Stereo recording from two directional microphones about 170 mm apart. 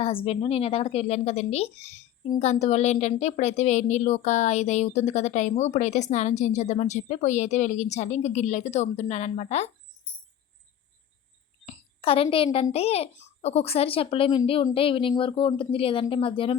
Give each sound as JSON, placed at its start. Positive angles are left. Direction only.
{"t": 0.0, "sound": "a child's voice", "side_deg": 35}
{"t": 11.6, "sound": "a sound", "side_deg": 35}
{"t": 12.7, "sound": "a child's voice", "side_deg": 35}